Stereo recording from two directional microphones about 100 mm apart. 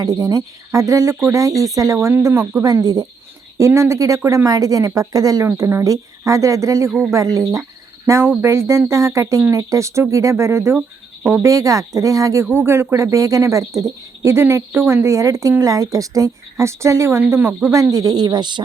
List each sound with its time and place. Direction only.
0.0 s speech: 40° right (ahead or behind)
5.5 s speech: 25° right (ahead or behind)
10.8 s speech: 15° right (ahead or behind)
11.4 s speech: 35° right (ahead or behind)
17.9 s speech: 40° right (ahead or behind)